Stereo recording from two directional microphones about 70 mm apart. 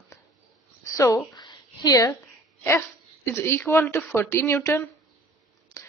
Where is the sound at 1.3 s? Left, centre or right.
Left.